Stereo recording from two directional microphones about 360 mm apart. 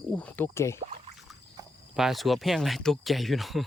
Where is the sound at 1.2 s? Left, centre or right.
Centre.